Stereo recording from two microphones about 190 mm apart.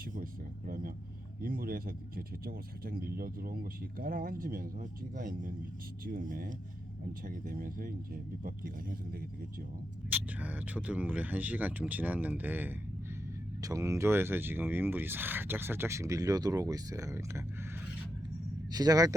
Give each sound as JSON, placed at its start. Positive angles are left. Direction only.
{"t": 0.0, "sound": "a sound", "side_deg": -45}
{"t": 0.7, "sound": "vehicle", "side_deg": -45}
{"t": 1.4, "sound": "speech", "side_deg": -50}
{"t": 10.1, "sound": "speech", "side_deg": -10}
{"t": 18.7, "sound": "a man's voice", "side_deg": -20}